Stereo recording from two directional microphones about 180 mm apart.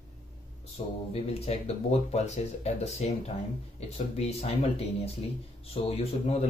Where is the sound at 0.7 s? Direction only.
35° left (ahead or behind).